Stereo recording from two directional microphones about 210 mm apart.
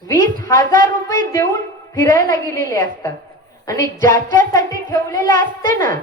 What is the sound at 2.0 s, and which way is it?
Speech, 40° right (ahead or behind).